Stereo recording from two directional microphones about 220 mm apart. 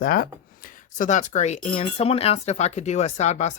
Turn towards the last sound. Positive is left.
turn(degrees=30)  # may be behind; listen again after turning